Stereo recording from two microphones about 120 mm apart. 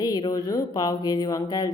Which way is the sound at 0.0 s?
30° left (ahead or behind).